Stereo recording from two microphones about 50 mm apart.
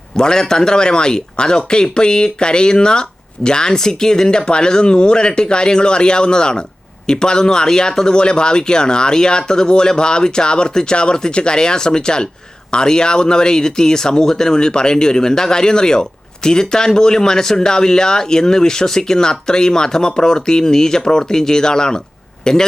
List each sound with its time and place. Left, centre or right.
0.2 s speech: centre